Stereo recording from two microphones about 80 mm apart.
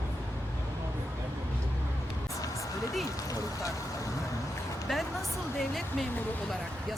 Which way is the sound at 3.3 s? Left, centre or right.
Left.